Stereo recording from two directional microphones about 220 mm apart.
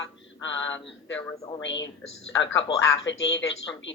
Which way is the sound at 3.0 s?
55° left (ahead or behind).